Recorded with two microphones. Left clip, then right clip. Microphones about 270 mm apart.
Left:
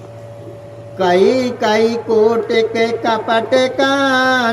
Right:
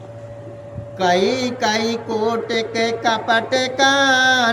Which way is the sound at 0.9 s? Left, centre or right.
Centre.